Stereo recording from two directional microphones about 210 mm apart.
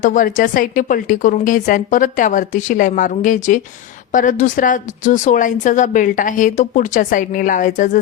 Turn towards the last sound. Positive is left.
turn(degrees=40)  # may be behind; listen again after turning